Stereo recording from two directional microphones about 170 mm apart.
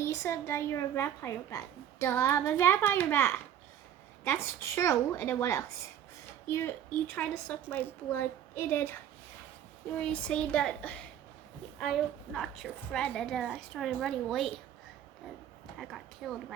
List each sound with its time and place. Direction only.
0.0 s speech: 15° left (ahead or behind)
10.0 s a woman's voice: 5° left (ahead or behind)
15.8 s a woman's voice: centre (ahead or behind)